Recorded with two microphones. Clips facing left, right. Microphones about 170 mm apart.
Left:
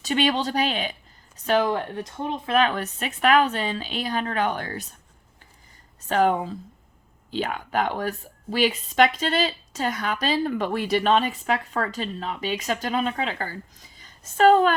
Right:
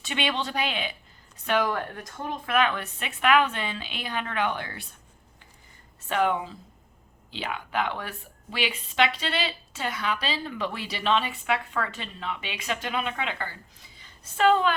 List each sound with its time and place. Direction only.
0.0 s a woman's voice: 40° left (ahead or behind)
1.5 s speech: 25° left (ahead or behind)
2.6 s a woman's voice: 40° left (ahead or behind)
6.1 s a woman's voice: 40° left (ahead or behind)